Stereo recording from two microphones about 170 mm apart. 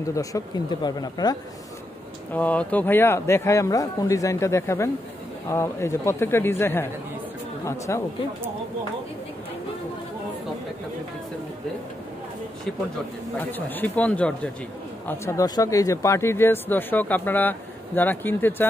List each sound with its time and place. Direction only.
0.0 s speech: 20° left (ahead or behind)
2.3 s speech: 10° left (ahead or behind)
13.4 s speech: 10° left (ahead or behind)